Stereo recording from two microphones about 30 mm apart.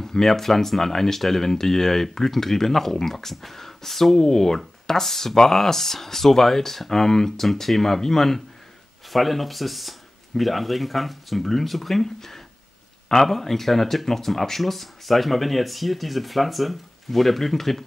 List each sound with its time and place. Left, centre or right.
0.0 s speech: centre
9.1 s speech: centre